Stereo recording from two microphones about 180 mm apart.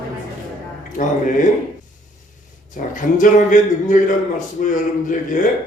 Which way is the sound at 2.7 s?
45° left (ahead or behind).